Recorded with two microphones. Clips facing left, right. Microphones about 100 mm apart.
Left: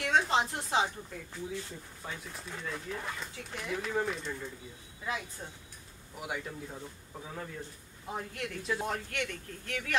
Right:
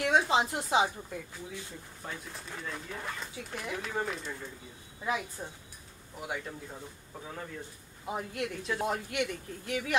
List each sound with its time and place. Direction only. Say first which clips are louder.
0.0 s speech: right 2 dB; 10° right (ahead or behind)
2.0 s speech: even; centre (ahead or behind)
5.0 s speech: right 4 dB; 15° right (ahead or behind)
6.1 s speech: even; centre (ahead or behind)
8.1 s speech: right 3 dB; 15° right (ahead or behind)